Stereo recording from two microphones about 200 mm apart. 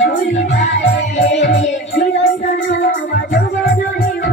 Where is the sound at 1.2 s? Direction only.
60° left (ahead or behind).